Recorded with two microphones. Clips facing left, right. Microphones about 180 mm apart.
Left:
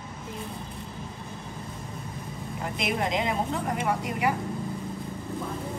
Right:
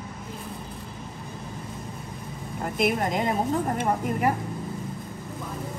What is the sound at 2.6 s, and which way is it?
A woman's voice, 45° right (ahead or behind).